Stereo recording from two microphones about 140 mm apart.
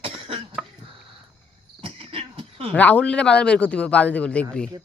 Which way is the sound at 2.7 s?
10° left (ahead or behind).